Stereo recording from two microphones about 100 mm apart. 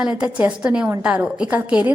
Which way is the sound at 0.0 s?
10° right (ahead or behind).